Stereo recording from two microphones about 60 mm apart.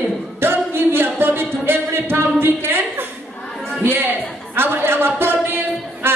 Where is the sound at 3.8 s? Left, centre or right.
Right.